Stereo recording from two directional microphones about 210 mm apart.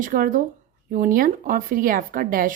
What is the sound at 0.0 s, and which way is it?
Speech, 40° right (ahead or behind).